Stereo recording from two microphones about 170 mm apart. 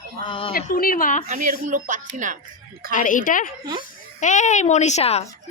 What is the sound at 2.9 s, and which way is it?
A woman's voice, 50° left (ahead or behind).